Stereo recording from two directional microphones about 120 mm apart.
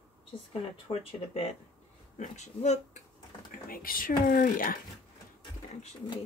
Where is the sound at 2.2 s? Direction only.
70° left (ahead or behind).